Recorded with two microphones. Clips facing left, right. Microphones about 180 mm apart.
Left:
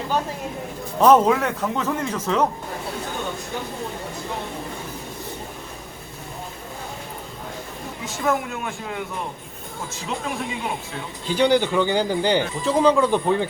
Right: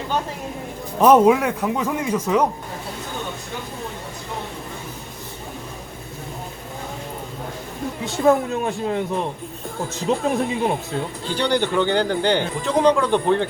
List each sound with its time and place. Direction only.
1.0 s a man's voice: 10° right (ahead or behind)
8.0 s speech: 35° right (ahead or behind)
10.1 s speech: 35° right (ahead or behind)
11.3 s speech: 10° left (ahead or behind)